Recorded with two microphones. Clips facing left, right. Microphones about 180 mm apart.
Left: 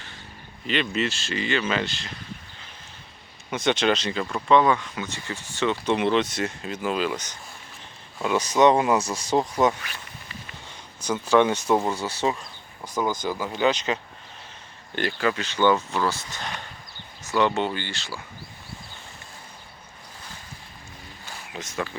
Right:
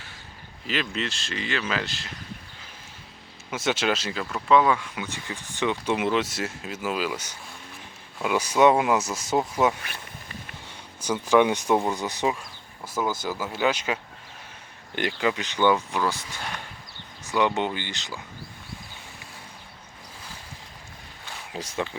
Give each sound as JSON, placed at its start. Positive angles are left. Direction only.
{"t": 0.7, "sound": "speech", "side_deg": 0}
{"t": 3.5, "sound": "speech", "side_deg": -5}
{"t": 11.0, "sound": "speech", "side_deg": -10}
{"t": 21.5, "sound": "speech", "side_deg": -30}